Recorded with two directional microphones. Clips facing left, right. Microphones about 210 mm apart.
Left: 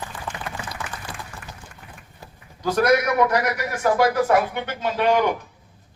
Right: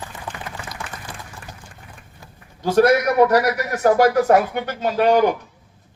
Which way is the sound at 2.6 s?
25° right (ahead or behind).